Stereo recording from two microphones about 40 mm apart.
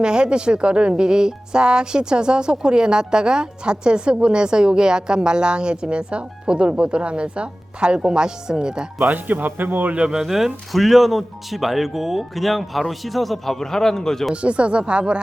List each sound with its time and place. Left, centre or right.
0.0 s a woman's voice: right
9.1 s speech: right
10.1 s speech: centre
14.4 s a woman's voice: right